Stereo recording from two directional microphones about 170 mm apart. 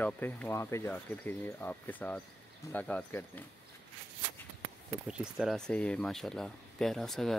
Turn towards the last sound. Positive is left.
turn(degrees=0)  # may be behind; listen again after turning